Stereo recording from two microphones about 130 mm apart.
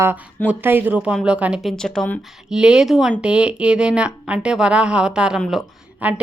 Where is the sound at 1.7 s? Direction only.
5° left (ahead or behind).